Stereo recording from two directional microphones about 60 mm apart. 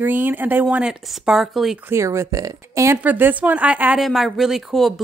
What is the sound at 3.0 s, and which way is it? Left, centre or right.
Speech, right.